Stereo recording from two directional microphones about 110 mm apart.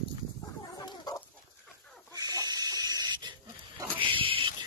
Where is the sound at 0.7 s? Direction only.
35° left (ahead or behind).